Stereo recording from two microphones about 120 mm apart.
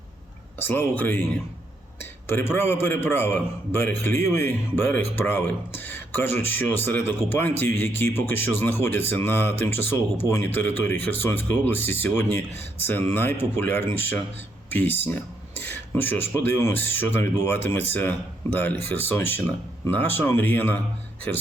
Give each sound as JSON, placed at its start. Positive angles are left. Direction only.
{"t": 0.6, "sound": "speech", "side_deg": 20}